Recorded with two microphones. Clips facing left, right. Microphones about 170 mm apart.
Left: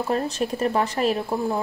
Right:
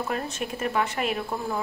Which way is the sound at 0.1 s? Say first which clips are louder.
Left 6 dB; 35° left (ahead or behind).